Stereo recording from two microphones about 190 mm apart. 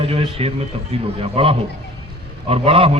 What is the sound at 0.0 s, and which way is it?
A man's voice, 30° right (ahead or behind).